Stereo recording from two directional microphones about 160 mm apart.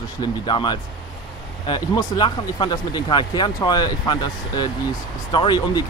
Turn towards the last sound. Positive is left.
turn(degrees=25)  # may be behind; listen again after turning